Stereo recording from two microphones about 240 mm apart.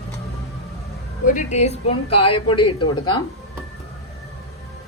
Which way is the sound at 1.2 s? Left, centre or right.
Left.